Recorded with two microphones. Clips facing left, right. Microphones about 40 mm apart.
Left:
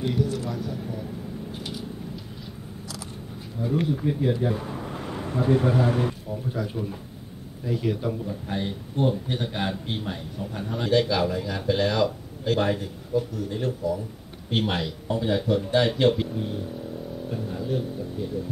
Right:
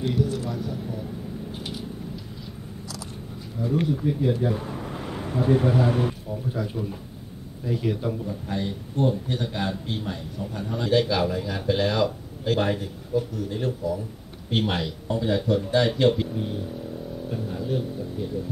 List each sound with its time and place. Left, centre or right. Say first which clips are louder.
0.1 s speech: right 1 dB; centre
3.8 s speech: even; centre
4.4 s a man's voice: even; centre
8.5 s a man's voice: right 1 dB; left
10.9 s a man's voice: even; centre
17.3 s a man's voice: right 1 dB; centre